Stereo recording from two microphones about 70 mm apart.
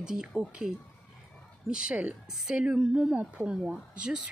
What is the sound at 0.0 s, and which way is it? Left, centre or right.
Speech, centre.